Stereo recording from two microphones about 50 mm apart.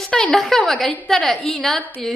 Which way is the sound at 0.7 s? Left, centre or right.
Centre.